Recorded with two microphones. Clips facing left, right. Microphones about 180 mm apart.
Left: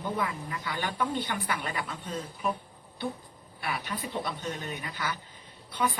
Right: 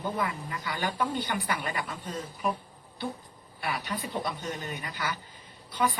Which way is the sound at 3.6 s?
Centre (ahead or behind).